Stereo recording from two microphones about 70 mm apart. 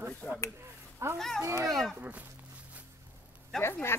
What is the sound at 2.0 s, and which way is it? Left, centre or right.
Speech, right.